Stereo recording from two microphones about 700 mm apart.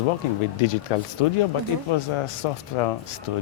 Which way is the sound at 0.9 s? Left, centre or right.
Left.